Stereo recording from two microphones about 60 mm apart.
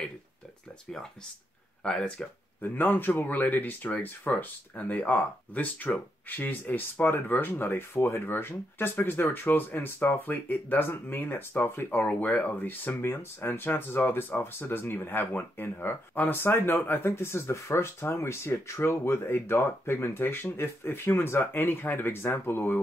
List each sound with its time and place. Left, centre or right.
1.8 s speech: centre
2.6 s speech: left
13.0 s speech: left